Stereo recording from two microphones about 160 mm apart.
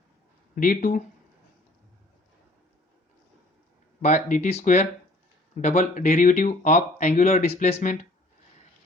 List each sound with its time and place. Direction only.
0.5 s speech: 60° left (ahead or behind)
4.0 s speech: 45° left (ahead or behind)